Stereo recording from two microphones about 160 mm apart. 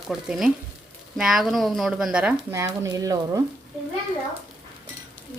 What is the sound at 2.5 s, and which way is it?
Speech, 20° right (ahead or behind).